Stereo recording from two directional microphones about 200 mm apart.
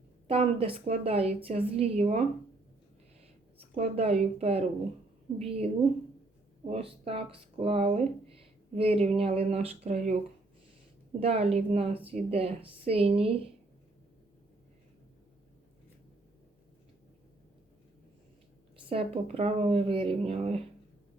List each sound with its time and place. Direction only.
0.3 s speech: 30° right (ahead or behind)
3.8 s speech: 30° right (ahead or behind)
11.2 s speech: 30° right (ahead or behind)
18.9 s speech: 30° right (ahead or behind)